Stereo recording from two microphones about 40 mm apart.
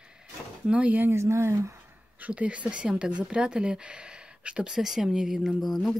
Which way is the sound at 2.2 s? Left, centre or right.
Right.